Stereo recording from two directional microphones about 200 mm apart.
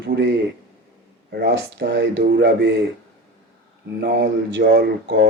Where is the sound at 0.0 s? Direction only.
60° right (ahead or behind).